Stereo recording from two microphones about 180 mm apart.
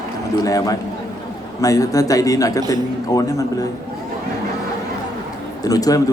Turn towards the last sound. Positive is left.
turn(degrees=20)  # may be behind; listen again after turning